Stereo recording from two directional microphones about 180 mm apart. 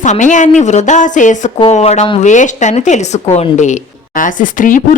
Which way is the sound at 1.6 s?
30° left (ahead or behind).